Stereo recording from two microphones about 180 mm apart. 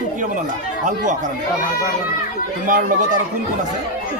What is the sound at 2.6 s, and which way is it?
Speech, 50° right (ahead or behind).